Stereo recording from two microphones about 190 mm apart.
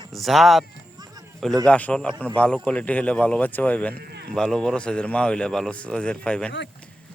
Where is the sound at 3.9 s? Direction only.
55° right (ahead or behind).